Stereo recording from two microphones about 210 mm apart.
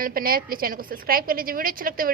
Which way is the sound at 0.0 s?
45° right (ahead or behind).